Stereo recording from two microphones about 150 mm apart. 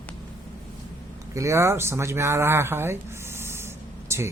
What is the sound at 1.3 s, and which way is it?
Speech, 20° right (ahead or behind).